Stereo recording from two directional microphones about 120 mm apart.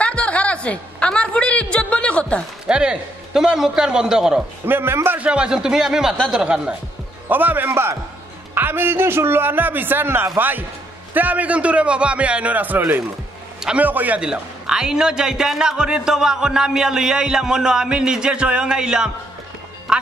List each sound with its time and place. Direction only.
0.0 s a sound: 10° left (ahead or behind)
2.6 s a man's voice: 10° right (ahead or behind)
4.6 s a man's voice: 20° right (ahead or behind)